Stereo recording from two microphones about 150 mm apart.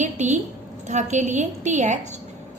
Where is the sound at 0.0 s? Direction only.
50° right (ahead or behind).